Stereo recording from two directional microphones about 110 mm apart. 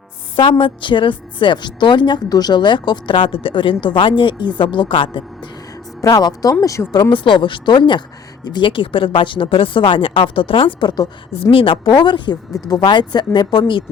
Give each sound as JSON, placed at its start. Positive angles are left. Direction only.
{"t": 0.6, "sound": "a woman's voice", "side_deg": 50}
{"t": 6.0, "sound": "speech", "side_deg": 30}
{"t": 7.1, "sound": "a woman's voice", "side_deg": 50}